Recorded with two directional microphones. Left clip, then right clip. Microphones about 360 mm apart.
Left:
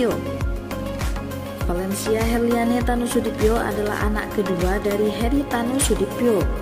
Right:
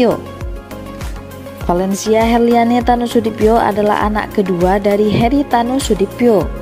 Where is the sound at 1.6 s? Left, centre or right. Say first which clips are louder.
Right 9 dB; centre.